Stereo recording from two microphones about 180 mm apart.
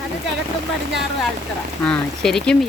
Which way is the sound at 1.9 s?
5° left (ahead or behind).